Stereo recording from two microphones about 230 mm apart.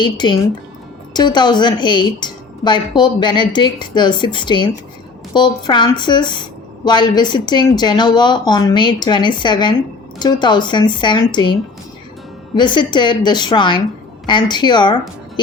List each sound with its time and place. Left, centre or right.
0.0 s a woman's voice: centre
12.5 s a woman's voice: centre